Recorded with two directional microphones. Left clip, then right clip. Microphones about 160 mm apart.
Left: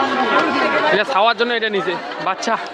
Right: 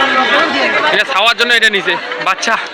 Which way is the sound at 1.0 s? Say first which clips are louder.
Right 4 dB; 35° left (ahead or behind).